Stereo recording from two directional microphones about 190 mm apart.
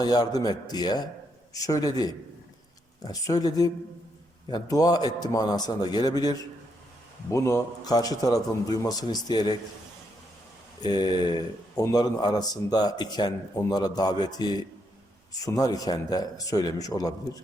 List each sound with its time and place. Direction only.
0.0 s a man's voice: 20° left (ahead or behind)
10.8 s a man's voice: 20° left (ahead or behind)